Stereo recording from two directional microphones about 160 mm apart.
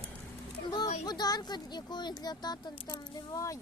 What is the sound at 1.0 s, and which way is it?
Speech, 25° left (ahead or behind).